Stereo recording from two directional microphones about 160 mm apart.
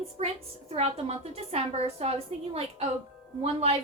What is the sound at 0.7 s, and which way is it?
A woman's voice, 40° right (ahead or behind).